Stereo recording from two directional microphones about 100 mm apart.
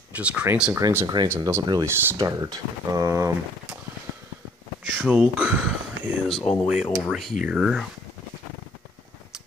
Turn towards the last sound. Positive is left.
turn(degrees=-5)  # may be behind; listen again after turning